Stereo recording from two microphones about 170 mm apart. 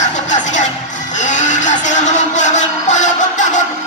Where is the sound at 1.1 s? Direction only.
45° left (ahead or behind).